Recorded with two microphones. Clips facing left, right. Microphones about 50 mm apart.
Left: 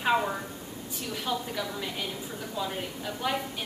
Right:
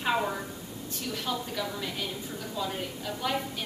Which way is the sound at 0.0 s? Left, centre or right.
Centre.